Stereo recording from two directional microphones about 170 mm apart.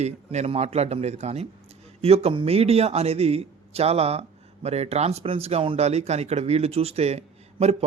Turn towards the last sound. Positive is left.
turn(degrees=-40)  # may be behind; listen again after turning